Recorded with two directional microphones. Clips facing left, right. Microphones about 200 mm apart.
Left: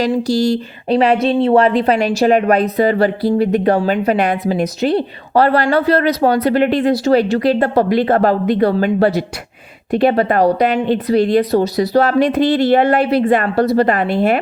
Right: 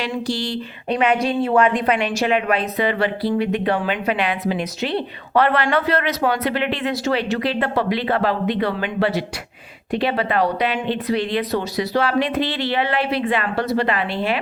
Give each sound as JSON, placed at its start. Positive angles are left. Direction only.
{"t": 0.0, "sound": "speech", "side_deg": 40}